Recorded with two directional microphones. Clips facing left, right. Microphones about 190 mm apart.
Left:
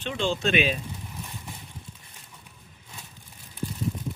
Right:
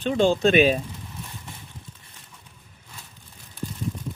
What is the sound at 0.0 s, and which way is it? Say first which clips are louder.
Speech: right 8 dB; 40° right (ahead or behind).